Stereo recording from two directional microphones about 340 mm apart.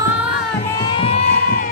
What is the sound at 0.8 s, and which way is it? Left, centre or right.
Music, centre.